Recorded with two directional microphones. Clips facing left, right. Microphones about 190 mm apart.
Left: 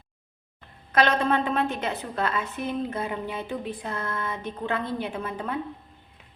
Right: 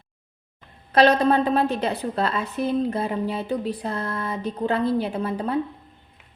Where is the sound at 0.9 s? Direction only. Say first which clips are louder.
Right 5 dB; 35° right (ahead or behind).